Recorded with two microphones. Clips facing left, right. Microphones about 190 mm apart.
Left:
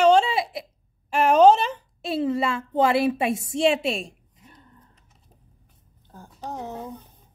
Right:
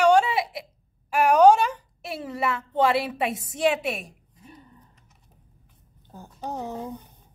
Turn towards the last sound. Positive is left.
turn(degrees=-15)  # may be behind; listen again after turning